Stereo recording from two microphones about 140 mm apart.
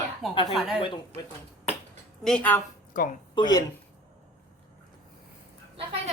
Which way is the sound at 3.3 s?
30° left (ahead or behind).